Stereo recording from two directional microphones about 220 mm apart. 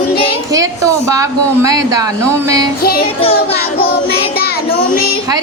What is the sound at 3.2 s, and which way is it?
Speech, 25° left (ahead or behind).